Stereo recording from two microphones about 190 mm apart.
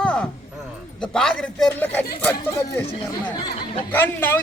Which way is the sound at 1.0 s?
5° left (ahead or behind).